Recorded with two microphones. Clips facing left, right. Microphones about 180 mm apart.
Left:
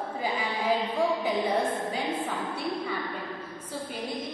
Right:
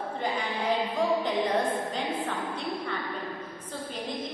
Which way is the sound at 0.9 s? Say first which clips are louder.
Even; 10° left (ahead or behind).